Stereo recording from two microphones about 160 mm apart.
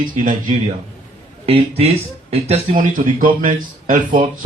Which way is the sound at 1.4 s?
35° right (ahead or behind).